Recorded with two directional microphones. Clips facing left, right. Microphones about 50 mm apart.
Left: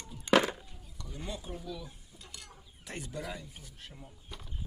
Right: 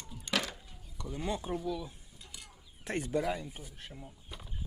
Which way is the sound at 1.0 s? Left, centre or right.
Centre.